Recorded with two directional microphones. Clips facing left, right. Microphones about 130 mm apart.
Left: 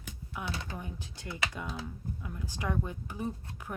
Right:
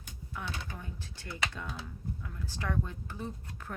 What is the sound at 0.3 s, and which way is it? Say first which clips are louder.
Speech: left 2 dB; 15° left (ahead or behind).